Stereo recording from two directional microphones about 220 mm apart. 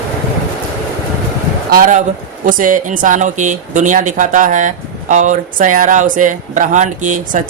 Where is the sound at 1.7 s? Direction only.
40° right (ahead or behind).